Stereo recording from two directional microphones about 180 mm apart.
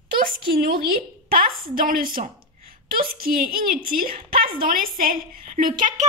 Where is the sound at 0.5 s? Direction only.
55° right (ahead or behind).